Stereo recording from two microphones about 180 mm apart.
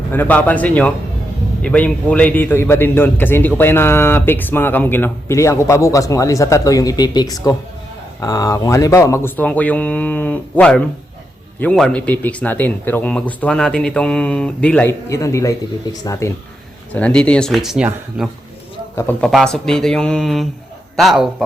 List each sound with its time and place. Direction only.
0.1 s speech: 10° left (ahead or behind)
15.1 s speech: 15° left (ahead or behind)
16.9 s speech: 5° left (ahead or behind)
18.9 s speech: 10° left (ahead or behind)